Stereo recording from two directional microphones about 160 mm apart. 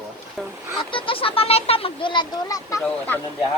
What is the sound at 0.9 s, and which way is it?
Speech, 35° left (ahead or behind).